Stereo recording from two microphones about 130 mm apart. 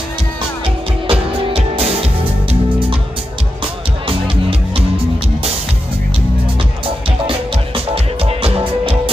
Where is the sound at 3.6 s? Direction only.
40° right (ahead or behind).